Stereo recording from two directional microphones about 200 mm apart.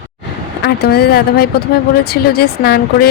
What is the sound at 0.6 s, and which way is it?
Speech, 55° left (ahead or behind).